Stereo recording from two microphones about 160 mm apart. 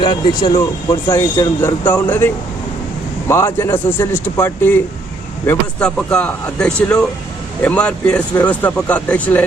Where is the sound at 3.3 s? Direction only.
15° left (ahead or behind).